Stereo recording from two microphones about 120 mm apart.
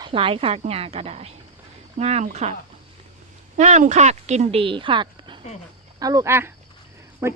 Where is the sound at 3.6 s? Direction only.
85° right; by 4.6 s 70° right (ahead or behind).